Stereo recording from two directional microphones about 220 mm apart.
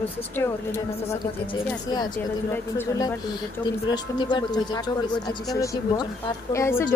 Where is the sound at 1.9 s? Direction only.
15° left (ahead or behind).